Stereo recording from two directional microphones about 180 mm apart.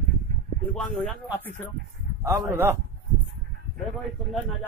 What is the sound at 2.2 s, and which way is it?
Speech, 15° right (ahead or behind).